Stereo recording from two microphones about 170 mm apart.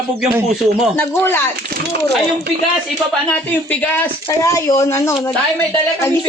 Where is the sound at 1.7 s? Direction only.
75° right (ahead or behind).